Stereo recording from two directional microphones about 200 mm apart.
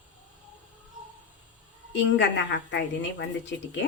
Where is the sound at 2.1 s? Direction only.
60° left (ahead or behind).